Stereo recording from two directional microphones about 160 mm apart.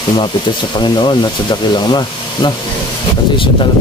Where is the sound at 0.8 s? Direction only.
30° left (ahead or behind).